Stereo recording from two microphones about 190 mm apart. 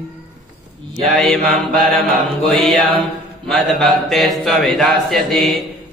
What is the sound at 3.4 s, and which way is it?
Speech, centre (ahead or behind).